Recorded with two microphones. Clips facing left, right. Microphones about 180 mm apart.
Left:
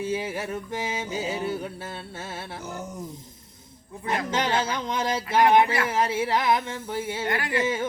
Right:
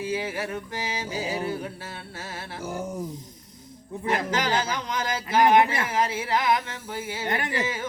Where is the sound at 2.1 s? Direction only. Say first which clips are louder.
Left 1 dB; 20° left (ahead or behind).